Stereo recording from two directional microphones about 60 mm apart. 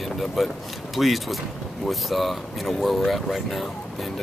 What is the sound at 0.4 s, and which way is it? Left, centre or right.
Speech, centre.